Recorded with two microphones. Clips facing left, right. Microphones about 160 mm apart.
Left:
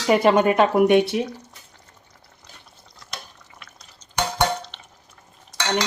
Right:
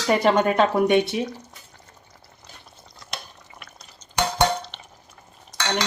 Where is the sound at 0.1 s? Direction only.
10° left (ahead or behind).